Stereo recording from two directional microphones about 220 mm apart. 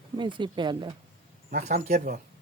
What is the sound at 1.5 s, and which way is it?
Speech, 35° right (ahead or behind).